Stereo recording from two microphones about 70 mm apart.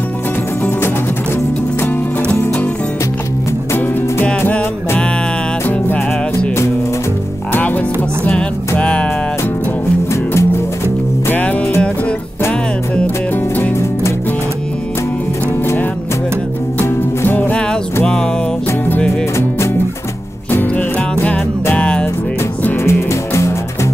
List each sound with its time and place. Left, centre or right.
3.7 s music: left
8.2 s music: centre
17.2 s music: left
21.7 s music: centre
22.8 s music: left